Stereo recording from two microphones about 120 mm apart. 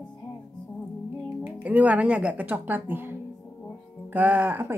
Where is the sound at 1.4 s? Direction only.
10° right (ahead or behind).